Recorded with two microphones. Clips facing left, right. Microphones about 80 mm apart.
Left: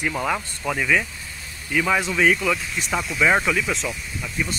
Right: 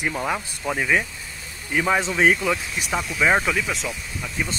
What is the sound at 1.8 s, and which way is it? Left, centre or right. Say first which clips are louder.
Speech: right 1 dB; right.